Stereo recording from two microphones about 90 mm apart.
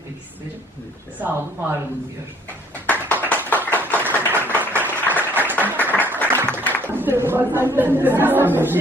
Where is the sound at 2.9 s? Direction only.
20° left (ahead or behind).